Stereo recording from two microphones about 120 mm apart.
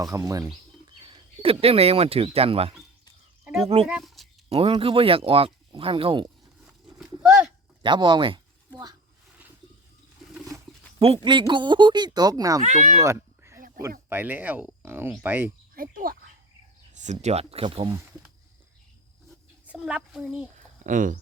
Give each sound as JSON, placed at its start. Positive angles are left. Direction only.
{"t": 0.0, "sound": "speech", "side_deg": -30}
{"t": 1.0, "sound": "a sound", "side_deg": -45}
{"t": 1.6, "sound": "speech", "side_deg": -55}
{"t": 3.8, "sound": "a sound", "side_deg": -5}
{"t": 4.4, "sound": "speech", "side_deg": -55}
{"t": 6.7, "sound": "a sound", "side_deg": -5}
{"t": 7.8, "sound": "speech", "side_deg": -40}
{"t": 11.2, "sound": "speech", "side_deg": -40}
{"t": 12.6, "sound": "speech", "side_deg": -85}
{"t": 13.0, "sound": "a sound", "side_deg": -25}
{"t": 13.8, "sound": "speech", "side_deg": -15}
{"t": 16.9, "sound": "speech", "side_deg": -85}
{"t": 19.6, "sound": "a child's voice", "side_deg": -10}
{"t": 20.8, "sound": "speech", "side_deg": -90}